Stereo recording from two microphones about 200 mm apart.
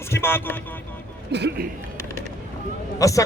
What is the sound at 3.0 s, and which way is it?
Speech, 15° left (ahead or behind).